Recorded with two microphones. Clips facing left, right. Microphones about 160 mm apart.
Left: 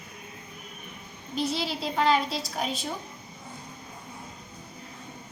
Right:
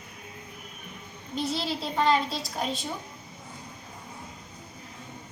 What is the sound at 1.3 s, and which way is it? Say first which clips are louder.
A woman's voice: left 1 dB; centre (ahead or behind).